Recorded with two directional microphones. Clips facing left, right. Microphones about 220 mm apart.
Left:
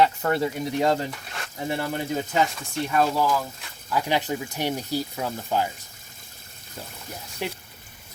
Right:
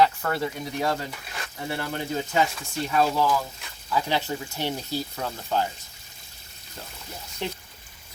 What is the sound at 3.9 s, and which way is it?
Speech, 15° left (ahead or behind).